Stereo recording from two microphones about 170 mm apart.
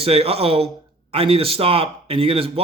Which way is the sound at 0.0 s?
35° right (ahead or behind).